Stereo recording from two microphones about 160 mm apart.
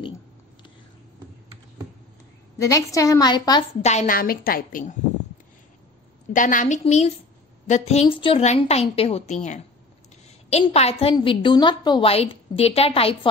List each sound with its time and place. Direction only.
2.6 s a woman's voice: 20° left (ahead or behind)
3.8 s a woman's voice: 50° left (ahead or behind)
6.3 s a woman's voice: 55° left (ahead or behind)
10.6 s a woman's voice: 40° left (ahead or behind)